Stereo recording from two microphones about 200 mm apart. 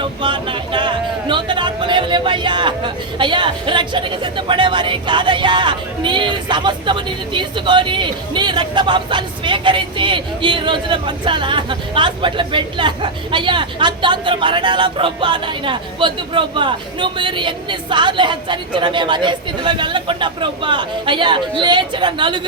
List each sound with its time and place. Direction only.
0.0 s speech: 25° right (ahead or behind)